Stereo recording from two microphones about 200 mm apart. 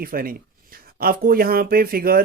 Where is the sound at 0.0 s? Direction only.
45° right (ahead or behind).